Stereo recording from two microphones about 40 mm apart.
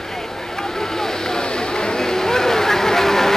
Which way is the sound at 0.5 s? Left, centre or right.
Centre.